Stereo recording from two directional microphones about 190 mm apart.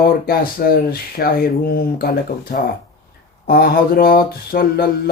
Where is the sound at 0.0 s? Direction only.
50° left (ahead or behind).